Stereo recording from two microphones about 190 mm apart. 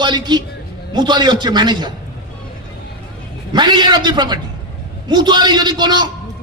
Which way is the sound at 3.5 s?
25° right (ahead or behind).